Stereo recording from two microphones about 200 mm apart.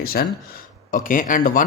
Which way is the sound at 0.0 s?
50° left (ahead or behind).